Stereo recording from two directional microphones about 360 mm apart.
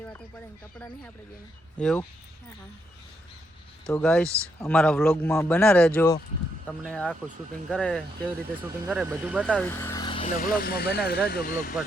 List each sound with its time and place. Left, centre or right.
1.8 s a man's voice: centre
3.8 s a man's voice: centre; by 11.7 s left